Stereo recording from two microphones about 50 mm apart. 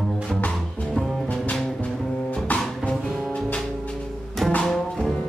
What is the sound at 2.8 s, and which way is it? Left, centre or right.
Music, centre.